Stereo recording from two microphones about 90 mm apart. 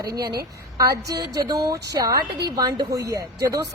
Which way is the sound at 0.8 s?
40° right (ahead or behind).